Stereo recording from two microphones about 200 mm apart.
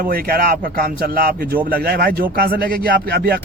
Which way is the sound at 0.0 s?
45° right (ahead or behind).